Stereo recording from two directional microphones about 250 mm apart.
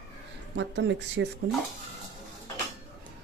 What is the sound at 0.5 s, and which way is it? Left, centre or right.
Speech, right.